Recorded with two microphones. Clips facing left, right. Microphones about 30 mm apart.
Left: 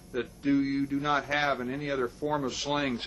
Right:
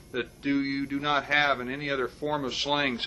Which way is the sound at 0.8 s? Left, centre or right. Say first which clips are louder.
Right 1 dB; right.